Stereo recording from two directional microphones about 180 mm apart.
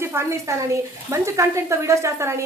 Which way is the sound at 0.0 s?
15° right (ahead or behind).